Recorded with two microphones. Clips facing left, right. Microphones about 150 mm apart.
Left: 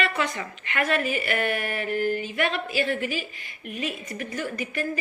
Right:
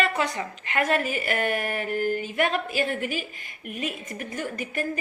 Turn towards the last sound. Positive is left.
turn(degrees=-45)  # may be behind; listen again after turning